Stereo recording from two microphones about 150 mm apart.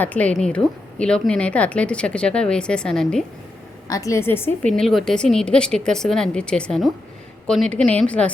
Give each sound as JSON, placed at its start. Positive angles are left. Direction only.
{"t": 0.0, "sound": "speech", "side_deg": 10}
{"t": 3.8, "sound": "speech", "side_deg": 20}
{"t": 4.8, "sound": "speech", "side_deg": 0}